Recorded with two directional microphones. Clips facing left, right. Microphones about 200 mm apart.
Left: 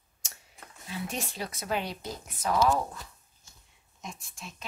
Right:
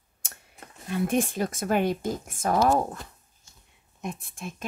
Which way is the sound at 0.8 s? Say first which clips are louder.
Right 11 dB; 55° right (ahead or behind).